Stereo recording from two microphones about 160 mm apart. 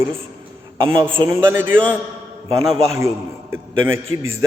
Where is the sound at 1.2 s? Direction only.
15° right (ahead or behind).